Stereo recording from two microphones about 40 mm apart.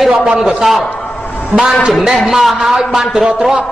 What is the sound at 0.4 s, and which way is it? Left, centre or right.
A man's voice, centre.